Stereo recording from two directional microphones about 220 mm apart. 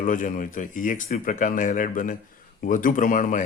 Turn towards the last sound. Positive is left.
turn(degrees=35)  # may be behind; listen again after turning